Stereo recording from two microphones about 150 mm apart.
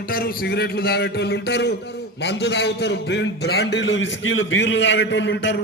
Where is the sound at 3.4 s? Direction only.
90° left.